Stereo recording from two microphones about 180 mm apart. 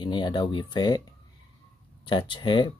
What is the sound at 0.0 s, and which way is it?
Speech, 25° left (ahead or behind).